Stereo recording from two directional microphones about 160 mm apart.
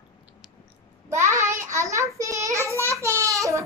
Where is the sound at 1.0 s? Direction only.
15° right (ahead or behind).